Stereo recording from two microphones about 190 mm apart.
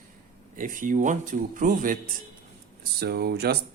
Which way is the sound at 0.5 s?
45° right (ahead or behind).